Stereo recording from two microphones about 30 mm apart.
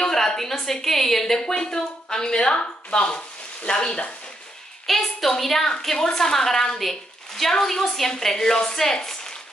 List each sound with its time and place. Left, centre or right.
0.0 s a woman's voice: centre
4.8 s a woman's voice: centre
5.9 s speech: left
6.8 s a sound: centre
7.6 s a woman's voice: centre